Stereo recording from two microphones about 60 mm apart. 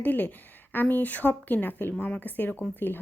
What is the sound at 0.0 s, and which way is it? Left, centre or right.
Speech, left.